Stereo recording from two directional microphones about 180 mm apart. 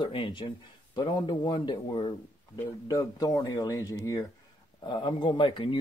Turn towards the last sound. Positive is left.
turn(degrees=30)  # may be behind; listen again after turning